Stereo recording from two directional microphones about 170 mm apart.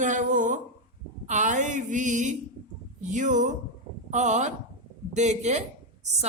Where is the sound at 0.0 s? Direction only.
45° right (ahead or behind).